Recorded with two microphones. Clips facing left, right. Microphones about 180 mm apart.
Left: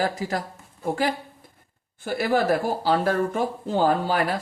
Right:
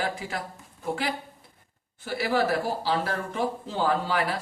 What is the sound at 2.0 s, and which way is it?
Speech, 50° left (ahead or behind).